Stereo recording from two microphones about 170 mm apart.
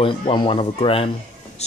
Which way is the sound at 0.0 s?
30° left (ahead or behind).